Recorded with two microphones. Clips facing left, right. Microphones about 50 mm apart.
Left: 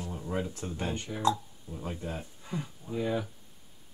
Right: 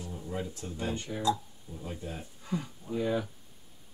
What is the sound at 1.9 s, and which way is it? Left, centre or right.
Speech, left.